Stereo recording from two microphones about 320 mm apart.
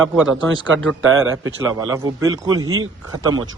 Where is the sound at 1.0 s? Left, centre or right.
Right.